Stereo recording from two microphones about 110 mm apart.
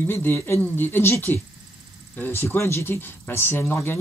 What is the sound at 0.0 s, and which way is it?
Speech, 20° left (ahead or behind).